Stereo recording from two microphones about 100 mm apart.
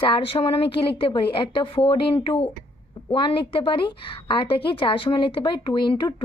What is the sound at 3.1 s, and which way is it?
A woman's voice, 55° left (ahead or behind).